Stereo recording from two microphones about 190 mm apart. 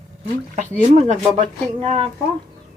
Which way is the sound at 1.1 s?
35° right (ahead or behind).